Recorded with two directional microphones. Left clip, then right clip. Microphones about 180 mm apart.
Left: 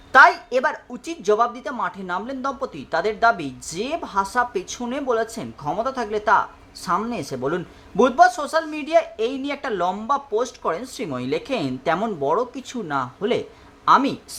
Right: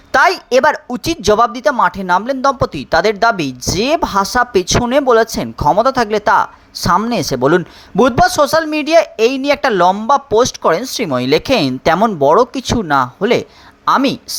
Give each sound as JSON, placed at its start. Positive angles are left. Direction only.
{"t": 0.1, "sound": "a woman's voice", "side_deg": -40}